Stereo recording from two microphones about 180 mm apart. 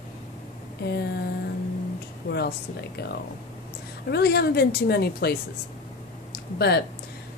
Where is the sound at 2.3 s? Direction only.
65° left (ahead or behind).